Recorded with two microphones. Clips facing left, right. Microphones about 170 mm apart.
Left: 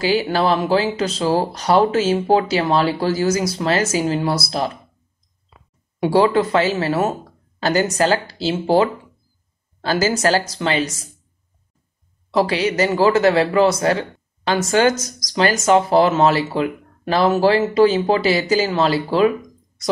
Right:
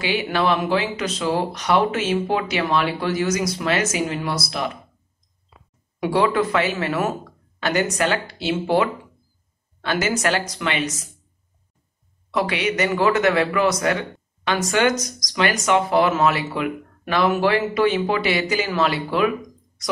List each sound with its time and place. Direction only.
0.0 s speech: 35° left (ahead or behind)
5.9 s speech: 30° left (ahead or behind)
12.3 s speech: 30° left (ahead or behind)